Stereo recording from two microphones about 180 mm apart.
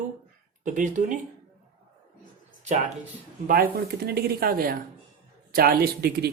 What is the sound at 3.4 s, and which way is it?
Speech, 55° right (ahead or behind).